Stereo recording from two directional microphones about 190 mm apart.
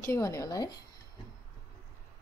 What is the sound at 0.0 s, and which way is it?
Speech, 15° left (ahead or behind).